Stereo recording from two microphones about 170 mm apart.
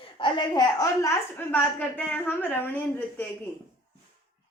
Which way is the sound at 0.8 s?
15° left (ahead or behind).